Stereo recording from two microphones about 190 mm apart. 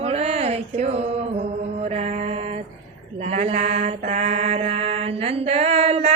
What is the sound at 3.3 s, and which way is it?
Mantra, 35° right (ahead or behind).